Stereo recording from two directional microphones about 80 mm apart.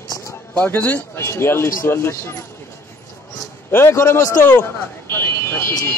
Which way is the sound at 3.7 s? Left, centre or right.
Left.